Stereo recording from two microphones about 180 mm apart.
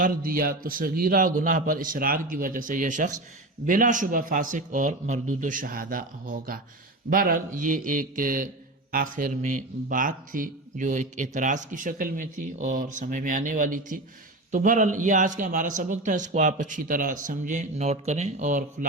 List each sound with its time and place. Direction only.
0.0 s speech: 50° right (ahead or behind)